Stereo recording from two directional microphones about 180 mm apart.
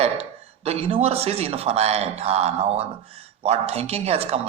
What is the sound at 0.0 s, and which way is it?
A man's voice, 35° right (ahead or behind).